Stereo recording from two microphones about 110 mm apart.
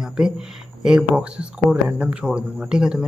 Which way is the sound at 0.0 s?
5° right (ahead or behind).